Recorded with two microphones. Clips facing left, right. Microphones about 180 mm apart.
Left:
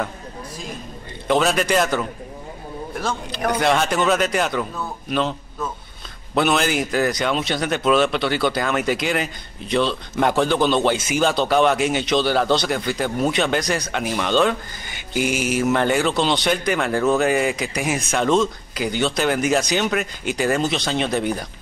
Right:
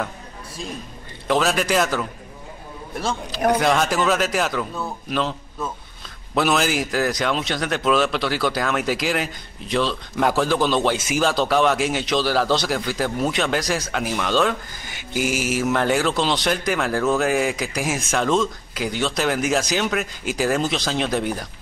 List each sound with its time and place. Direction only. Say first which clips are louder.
1.2 s speech: left 2 dB; centre (ahead or behind)
3.3 s speech: right 1 dB; centre (ahead or behind)